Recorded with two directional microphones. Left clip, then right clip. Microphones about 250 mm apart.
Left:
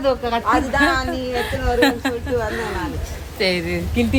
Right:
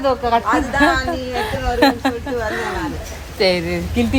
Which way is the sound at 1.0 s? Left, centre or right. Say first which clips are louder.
Right 1 dB; centre.